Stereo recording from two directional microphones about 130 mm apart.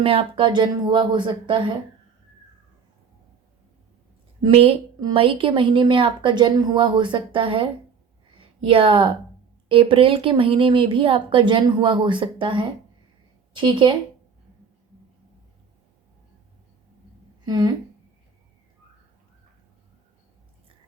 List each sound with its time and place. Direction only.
0.0 s a woman's voice: 45° right (ahead or behind)
4.5 s a woman's voice: 50° right (ahead or behind)
17.4 s speech: 30° right (ahead or behind)